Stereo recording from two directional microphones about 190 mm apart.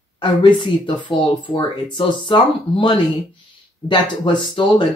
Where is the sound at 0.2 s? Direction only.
25° left (ahead or behind).